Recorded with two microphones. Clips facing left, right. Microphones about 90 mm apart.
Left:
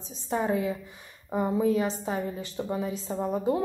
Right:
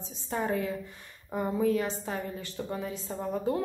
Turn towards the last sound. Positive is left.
turn(degrees=20)  # may be behind; listen again after turning